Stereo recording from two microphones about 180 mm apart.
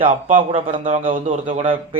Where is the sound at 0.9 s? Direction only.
45° right (ahead or behind).